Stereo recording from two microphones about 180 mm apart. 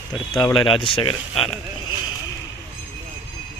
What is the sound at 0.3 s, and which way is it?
Speech, 25° left (ahead or behind).